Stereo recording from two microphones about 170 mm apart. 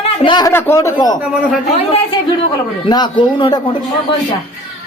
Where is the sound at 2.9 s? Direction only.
25° left (ahead or behind).